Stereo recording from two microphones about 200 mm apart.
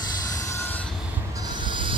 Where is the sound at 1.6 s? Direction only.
25° right (ahead or behind).